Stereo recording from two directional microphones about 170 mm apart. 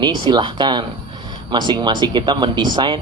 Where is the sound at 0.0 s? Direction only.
25° right (ahead or behind).